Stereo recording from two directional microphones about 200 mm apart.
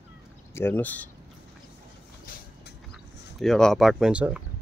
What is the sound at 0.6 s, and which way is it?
Speech, 10° left (ahead or behind).